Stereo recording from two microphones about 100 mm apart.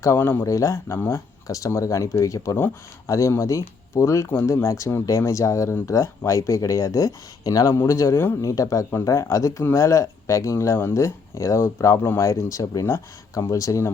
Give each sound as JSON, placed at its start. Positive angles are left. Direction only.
{"t": 0.0, "sound": "speech", "side_deg": 25}